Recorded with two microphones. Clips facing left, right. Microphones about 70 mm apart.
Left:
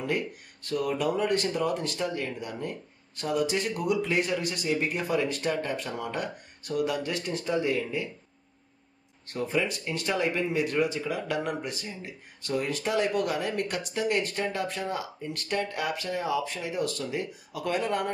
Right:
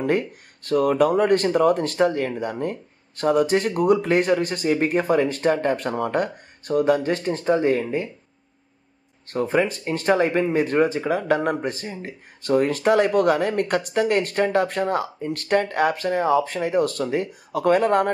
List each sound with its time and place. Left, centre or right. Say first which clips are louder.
0.7 s speech: right 9 dB; right
9.3 s speech: right 7 dB; right